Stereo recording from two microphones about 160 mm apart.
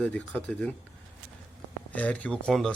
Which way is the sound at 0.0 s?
10° left (ahead or behind).